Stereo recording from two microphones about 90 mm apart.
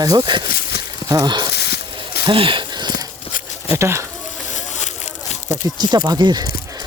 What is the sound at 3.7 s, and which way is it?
Speech, 30° right (ahead or behind).